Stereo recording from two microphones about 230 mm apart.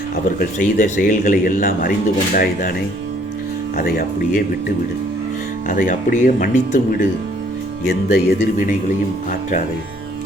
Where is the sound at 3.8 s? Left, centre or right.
Left.